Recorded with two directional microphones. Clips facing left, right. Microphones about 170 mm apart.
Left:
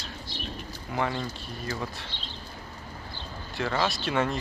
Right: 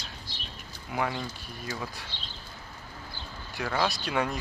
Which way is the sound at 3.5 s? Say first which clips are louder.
Left 1 dB; centre (ahead or behind).